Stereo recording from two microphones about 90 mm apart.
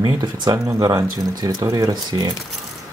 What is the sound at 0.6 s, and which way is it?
Speech, 35° right (ahead or behind).